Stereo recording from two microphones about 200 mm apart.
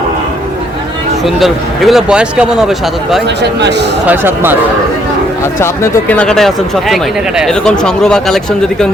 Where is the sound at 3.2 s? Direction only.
60° right (ahead or behind).